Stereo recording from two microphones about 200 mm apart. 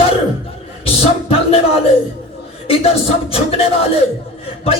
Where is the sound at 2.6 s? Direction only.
30° left (ahead or behind).